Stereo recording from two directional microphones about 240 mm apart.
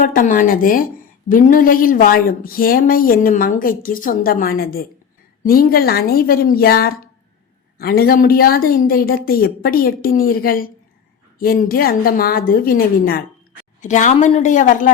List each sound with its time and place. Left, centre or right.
0.0 s speech: left